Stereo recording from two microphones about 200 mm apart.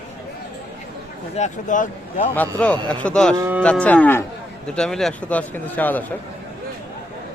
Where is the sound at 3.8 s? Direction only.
5° left (ahead or behind).